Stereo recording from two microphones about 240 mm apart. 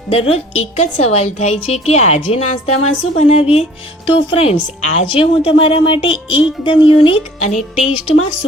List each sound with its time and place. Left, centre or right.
0.3 s a woman's voice: left